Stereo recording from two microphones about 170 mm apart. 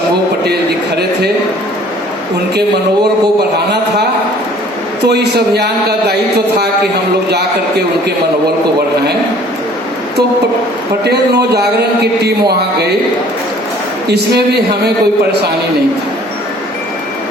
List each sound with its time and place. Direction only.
5.0 s a man's voice: 75° right (ahead or behind)
11.0 s a man's voice: 75° right (ahead or behind)